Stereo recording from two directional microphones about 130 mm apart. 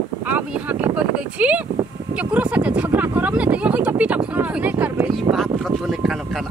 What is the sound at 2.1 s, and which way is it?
A woman's voice, 10° right (ahead or behind).